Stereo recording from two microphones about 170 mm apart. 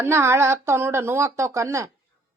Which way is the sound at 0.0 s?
15° right (ahead or behind).